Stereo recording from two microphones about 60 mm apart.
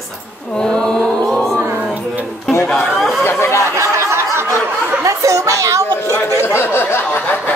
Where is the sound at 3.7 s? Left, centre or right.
Right.